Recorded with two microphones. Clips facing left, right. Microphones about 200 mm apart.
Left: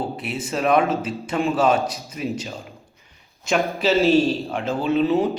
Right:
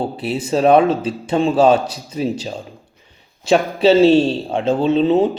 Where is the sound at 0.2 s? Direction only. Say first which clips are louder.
Right 7 dB; 30° right (ahead or behind).